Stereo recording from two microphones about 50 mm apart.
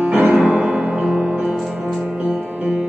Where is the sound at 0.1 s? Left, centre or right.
Right.